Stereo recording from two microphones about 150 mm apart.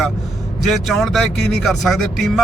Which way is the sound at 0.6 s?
Centre (ahead or behind).